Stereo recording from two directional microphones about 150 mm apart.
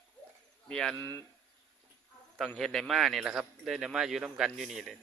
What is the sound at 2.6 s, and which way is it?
Speech, centre (ahead or behind).